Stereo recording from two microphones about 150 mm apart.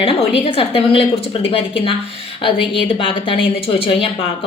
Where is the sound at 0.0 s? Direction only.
40° left (ahead or behind).